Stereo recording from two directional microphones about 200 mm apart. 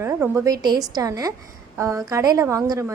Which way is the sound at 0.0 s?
15° right (ahead or behind).